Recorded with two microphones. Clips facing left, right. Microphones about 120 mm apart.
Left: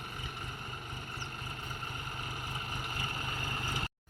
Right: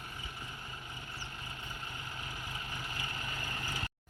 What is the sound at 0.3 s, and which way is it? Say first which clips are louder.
Vehicle: left 3 dB; 55° left (ahead or behind).